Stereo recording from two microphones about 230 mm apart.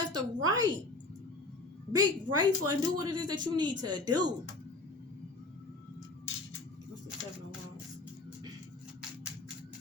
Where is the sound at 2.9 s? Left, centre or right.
Centre.